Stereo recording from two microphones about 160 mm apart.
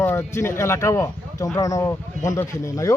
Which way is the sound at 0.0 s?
15° left (ahead or behind).